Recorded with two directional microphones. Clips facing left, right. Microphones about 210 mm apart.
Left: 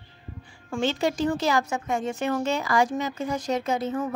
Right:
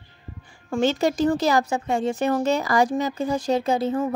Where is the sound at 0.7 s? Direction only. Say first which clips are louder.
Right 4 dB; 40° right (ahead or behind).